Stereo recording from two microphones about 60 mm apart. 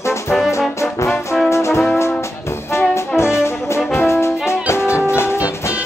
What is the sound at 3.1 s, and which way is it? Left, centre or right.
Brass instrument, left.